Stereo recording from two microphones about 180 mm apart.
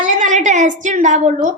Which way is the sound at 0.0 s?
45° right (ahead or behind).